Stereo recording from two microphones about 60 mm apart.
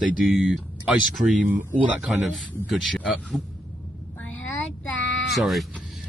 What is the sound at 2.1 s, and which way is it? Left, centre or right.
Speech, centre.